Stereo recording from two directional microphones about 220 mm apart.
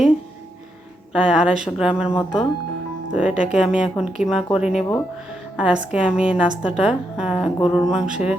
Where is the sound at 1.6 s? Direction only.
5° right (ahead or behind).